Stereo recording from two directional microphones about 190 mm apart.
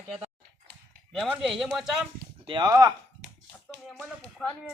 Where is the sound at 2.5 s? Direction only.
20° right (ahead or behind).